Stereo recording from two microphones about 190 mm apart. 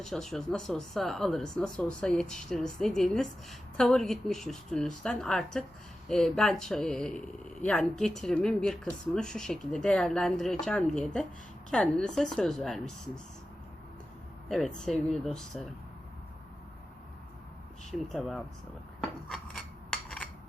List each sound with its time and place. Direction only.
0.0 s speech: centre (ahead or behind)
14.8 s speech: centre (ahead or behind)
18.1 s speech: centre (ahead or behind)
19.3 s a sound: centre (ahead or behind)